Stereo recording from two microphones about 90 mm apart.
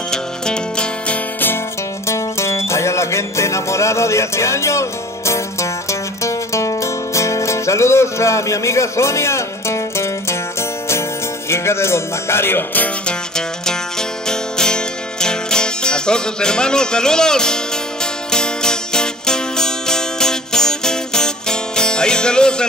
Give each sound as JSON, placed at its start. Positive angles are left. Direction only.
{"t": 0.1, "sound": "music", "side_deg": 10}
{"t": 2.0, "sound": "music", "side_deg": 30}
{"t": 11.4, "sound": "speech", "side_deg": 30}
{"t": 14.3, "sound": "music", "side_deg": 10}